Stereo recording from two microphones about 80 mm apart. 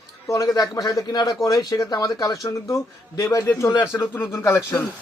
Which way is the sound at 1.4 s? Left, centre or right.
Left.